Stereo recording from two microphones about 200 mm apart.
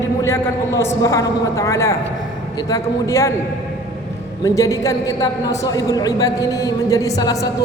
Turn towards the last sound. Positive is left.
turn(degrees=15)  # may be behind; listen again after turning